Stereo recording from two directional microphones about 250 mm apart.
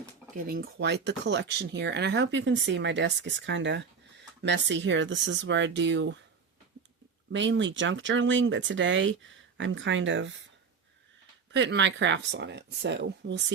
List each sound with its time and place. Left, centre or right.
0.4 s speech: right
7.3 s speech: right
11.5 s speech: right